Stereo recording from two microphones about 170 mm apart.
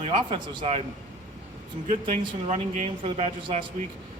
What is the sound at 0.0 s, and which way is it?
Speech, 35° right (ahead or behind).